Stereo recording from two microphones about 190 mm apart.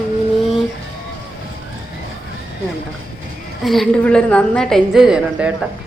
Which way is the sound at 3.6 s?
Centre (ahead or behind).